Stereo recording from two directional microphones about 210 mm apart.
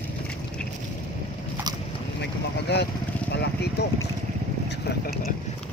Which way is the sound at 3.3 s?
50° left (ahead or behind).